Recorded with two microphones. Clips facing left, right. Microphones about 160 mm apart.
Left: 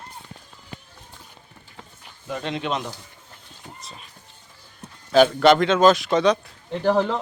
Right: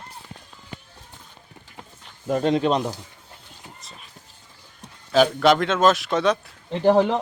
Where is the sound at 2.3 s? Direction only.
40° right (ahead or behind).